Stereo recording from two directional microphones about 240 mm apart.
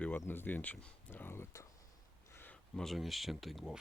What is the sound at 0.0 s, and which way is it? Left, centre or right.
Speech, centre.